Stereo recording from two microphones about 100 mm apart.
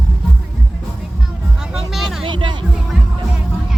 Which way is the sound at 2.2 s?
55° right (ahead or behind).